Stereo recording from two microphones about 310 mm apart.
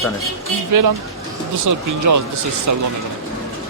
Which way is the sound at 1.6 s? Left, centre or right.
Right.